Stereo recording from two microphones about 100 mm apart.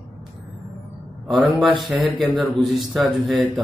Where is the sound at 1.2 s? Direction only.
Centre (ahead or behind).